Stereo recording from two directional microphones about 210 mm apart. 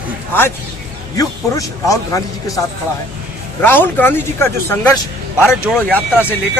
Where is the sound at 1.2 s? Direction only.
15° left (ahead or behind).